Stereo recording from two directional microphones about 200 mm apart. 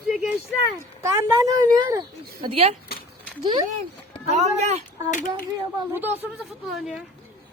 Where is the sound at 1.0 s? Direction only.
15° right (ahead or behind).